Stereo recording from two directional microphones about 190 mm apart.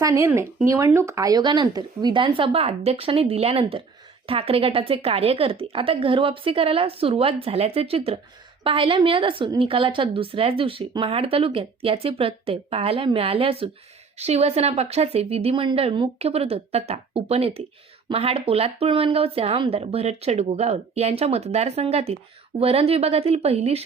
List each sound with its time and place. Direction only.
0.0 s a woman's voice: 15° right (ahead or behind); by 23.8 s 35° right (ahead or behind)